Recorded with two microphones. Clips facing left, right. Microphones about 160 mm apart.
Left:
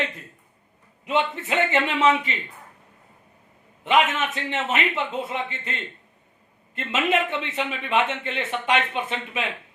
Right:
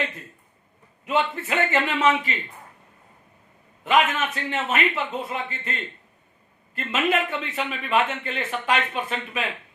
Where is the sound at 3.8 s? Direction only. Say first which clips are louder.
Even; 20° left (ahead or behind).